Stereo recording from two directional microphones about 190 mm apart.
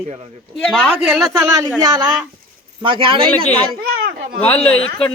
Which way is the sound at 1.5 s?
20° right (ahead or behind).